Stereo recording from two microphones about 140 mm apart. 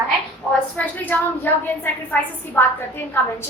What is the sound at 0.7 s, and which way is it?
Speech, 10° left (ahead or behind).